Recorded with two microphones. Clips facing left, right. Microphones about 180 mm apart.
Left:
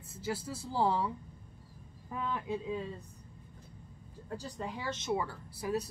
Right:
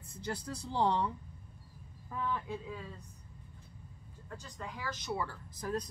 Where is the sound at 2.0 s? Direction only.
15° left (ahead or behind).